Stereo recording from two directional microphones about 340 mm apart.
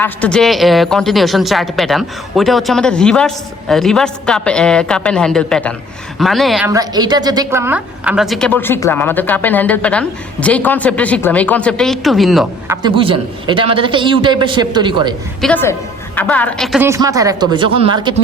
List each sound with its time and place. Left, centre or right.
0.0 s a woman's voice: centre
15.4 s a woman's voice: centre